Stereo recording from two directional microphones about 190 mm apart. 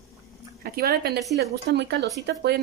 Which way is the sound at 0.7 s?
55° right (ahead or behind).